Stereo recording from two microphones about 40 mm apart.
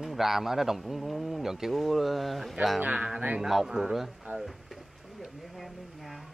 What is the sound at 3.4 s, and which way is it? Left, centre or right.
Speech, centre.